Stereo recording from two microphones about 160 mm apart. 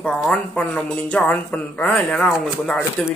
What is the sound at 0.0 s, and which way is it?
A man's voice, 5° left (ahead or behind).